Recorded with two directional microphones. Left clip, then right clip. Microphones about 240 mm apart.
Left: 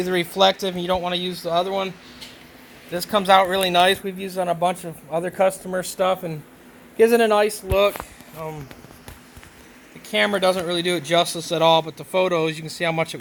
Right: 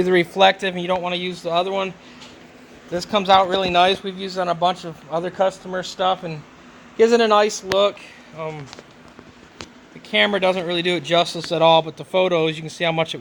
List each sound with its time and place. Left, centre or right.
0.0 s speech: right
0.9 s a man's voice: centre
2.9 s a man's voice: centre
5.5 s speech: centre
6.9 s a man's voice: centre
10.1 s a man's voice: centre